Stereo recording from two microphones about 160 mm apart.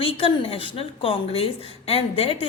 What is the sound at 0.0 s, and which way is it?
A woman's voice, 35° left (ahead or behind).